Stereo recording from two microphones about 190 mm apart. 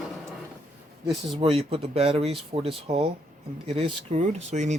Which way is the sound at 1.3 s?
30° right (ahead or behind).